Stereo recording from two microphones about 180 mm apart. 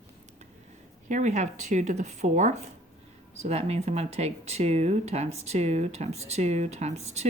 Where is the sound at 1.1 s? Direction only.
40° right (ahead or behind).